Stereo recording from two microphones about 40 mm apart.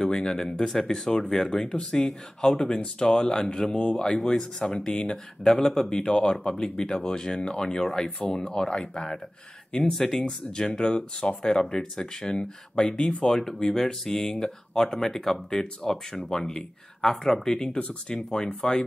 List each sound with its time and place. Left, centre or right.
0.0 s speech: centre
5.9 s speech: left
17.7 s speech: left